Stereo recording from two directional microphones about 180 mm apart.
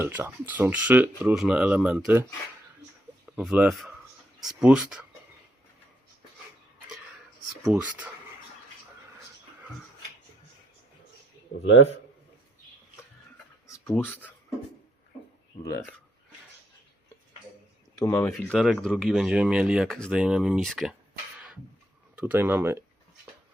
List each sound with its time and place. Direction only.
0.0 s speech: 10° right (ahead or behind)
3.2 s speech: 5° right (ahead or behind)
7.6 s speech: 5° right (ahead or behind)
13.7 s speech: 10° left (ahead or behind)
15.6 s speech: 15° left (ahead or behind)
18.0 s speech: 15° left (ahead or behind)
22.1 s speech: 5° right (ahead or behind)